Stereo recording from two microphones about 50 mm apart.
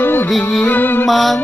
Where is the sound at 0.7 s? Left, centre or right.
Left.